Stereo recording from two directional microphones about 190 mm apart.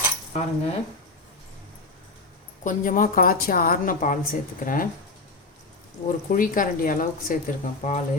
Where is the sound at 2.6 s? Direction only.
45° left (ahead or behind).